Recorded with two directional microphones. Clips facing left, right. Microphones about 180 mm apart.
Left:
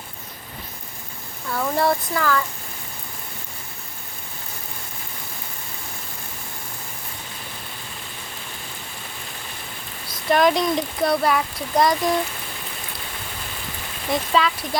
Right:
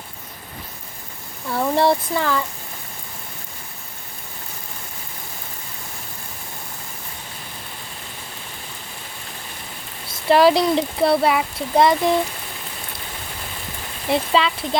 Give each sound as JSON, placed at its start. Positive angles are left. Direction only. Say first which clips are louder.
{"t": 1.5, "sound": "speech", "louder": "right 3 dB", "side_deg": -30}
{"t": 10.1, "sound": "speech", "louder": "right 4 dB", "side_deg": -30}
{"t": 14.1, "sound": "speech", "louder": "right 2 dB", "side_deg": -25}